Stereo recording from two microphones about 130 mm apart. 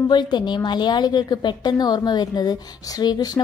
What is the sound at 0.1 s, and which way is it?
A woman's voice, 35° left (ahead or behind).